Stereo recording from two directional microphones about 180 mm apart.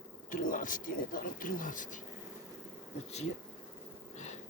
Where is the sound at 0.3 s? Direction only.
45° left (ahead or behind).